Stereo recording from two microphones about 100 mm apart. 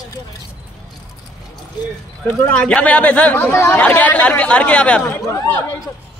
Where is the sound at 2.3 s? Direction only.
15° left (ahead or behind).